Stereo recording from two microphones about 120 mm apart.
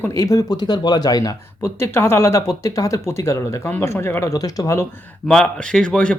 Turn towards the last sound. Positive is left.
turn(degrees=10)  # may be behind; listen again after turning